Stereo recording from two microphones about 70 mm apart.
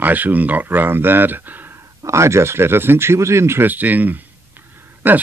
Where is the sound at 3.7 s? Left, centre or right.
Right.